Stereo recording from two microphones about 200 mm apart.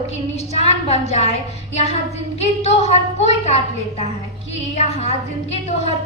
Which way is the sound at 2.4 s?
30° left (ahead or behind).